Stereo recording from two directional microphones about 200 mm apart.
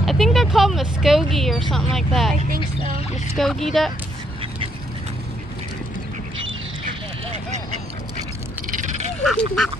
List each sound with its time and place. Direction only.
0.0 s speech: centre (ahead or behind)
2.3 s speech: 40° right (ahead or behind)
3.3 s speech: centre (ahead or behind)
8.7 s frog: 35° right (ahead or behind)
9.2 s speech: centre (ahead or behind)